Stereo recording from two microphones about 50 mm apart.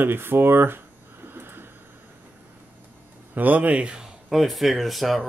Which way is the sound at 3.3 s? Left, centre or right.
Right.